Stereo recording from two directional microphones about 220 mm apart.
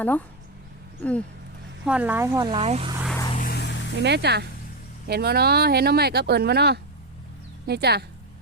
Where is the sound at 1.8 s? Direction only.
5° right (ahead or behind); by 2.9 s 25° right (ahead or behind).